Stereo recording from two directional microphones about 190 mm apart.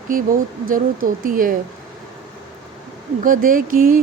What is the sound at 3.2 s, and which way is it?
Speech, 45° right (ahead or behind).